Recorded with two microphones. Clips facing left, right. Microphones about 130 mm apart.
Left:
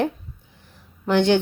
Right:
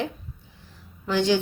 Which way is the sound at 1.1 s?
60° left (ahead or behind).